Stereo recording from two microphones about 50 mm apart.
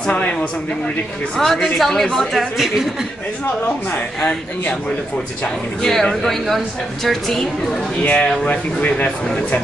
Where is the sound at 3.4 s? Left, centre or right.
Left; by 7.9 s centre.